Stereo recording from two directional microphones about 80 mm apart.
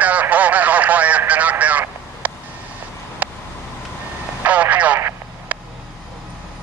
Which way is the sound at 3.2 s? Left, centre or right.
Right.